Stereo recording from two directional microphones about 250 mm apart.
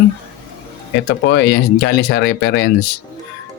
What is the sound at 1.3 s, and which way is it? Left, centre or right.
Speech, left.